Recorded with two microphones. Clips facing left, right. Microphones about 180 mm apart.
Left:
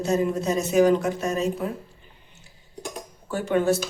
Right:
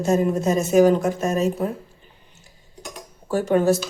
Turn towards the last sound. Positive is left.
turn(degrees=-40)  # may be behind; listen again after turning